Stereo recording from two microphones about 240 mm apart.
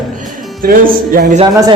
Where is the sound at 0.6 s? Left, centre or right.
Right.